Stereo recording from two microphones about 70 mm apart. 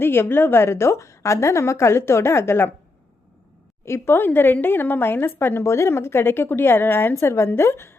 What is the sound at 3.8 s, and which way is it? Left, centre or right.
A woman's voice, left.